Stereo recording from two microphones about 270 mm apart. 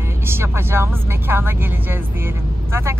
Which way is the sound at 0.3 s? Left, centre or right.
Centre.